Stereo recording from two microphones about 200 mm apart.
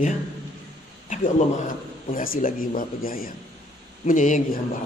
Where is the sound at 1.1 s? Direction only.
35° left (ahead or behind).